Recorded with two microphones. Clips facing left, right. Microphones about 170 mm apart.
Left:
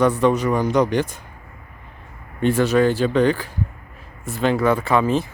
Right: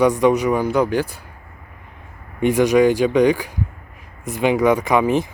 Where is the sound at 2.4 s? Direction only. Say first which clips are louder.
Right 3 dB; 15° right (ahead or behind).